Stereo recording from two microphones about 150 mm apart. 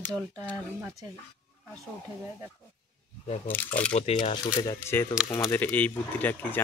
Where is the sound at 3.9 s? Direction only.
50° left (ahead or behind).